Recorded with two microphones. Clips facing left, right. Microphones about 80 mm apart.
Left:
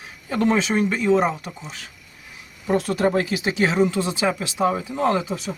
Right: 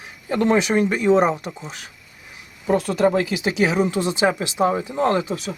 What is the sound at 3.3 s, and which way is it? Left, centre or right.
Speech, right.